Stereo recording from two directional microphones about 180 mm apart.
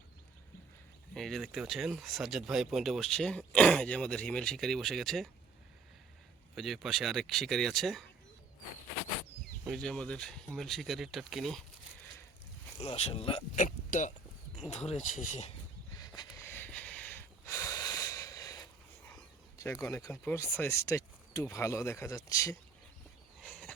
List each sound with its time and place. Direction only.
1.1 s speech: centre (ahead or behind)
6.6 s speech: centre (ahead or behind)
9.6 s speech: 5° left (ahead or behind)
12.8 s speech: 35° left (ahead or behind)
13.7 s speech: 45° left (ahead or behind)
16.0 s a sound: 20° left (ahead or behind)
19.1 s speech: 15° left (ahead or behind)
23.4 s a sound: 5° left (ahead or behind)